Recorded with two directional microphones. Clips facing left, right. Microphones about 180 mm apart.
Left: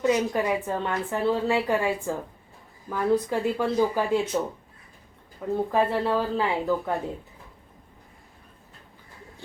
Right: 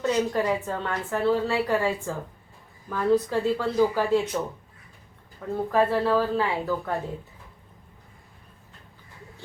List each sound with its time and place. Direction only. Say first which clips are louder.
0.0 s a woman's voice: left 1 dB; 15° left (ahead or behind)
5.4 s a woman's voice: even; 15° left (ahead or behind)